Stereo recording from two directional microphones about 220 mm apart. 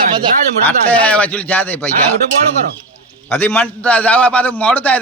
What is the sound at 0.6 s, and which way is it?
A man's voice, 5° left (ahead or behind).